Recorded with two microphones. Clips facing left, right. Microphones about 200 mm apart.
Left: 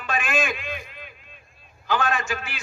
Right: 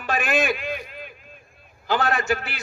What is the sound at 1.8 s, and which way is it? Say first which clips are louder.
Speech: right 2 dB; 40° right (ahead or behind).